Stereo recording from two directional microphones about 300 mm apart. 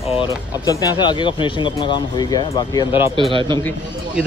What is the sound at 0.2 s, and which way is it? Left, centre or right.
Speech, centre.